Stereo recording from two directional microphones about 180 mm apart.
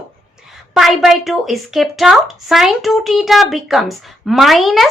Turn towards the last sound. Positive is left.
turn(degrees=0)  # may be behind; listen again after turning